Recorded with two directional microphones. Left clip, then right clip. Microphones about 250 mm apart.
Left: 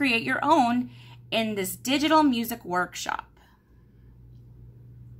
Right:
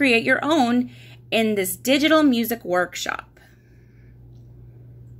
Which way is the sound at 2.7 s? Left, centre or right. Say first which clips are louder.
Right 5 dB; left.